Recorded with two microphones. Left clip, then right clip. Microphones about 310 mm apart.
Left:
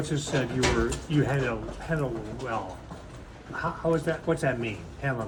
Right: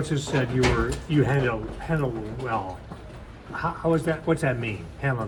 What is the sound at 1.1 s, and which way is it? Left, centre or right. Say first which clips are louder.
Speech: right 5 dB; right.